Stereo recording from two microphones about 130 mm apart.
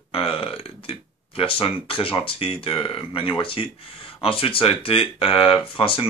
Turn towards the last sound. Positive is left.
turn(degrees=45)  # may be behind; listen again after turning